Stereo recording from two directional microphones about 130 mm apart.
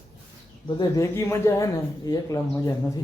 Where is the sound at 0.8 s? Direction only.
25° left (ahead or behind).